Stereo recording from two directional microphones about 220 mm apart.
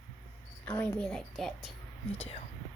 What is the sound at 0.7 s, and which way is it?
A woman's voice, 5° left (ahead or behind).